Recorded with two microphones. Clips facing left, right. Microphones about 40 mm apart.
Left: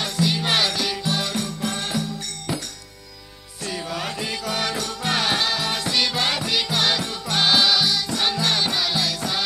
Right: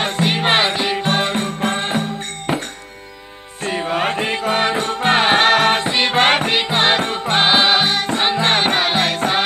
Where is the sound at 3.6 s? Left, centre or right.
Right.